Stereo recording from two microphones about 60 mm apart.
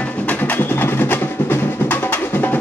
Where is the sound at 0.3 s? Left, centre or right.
Left.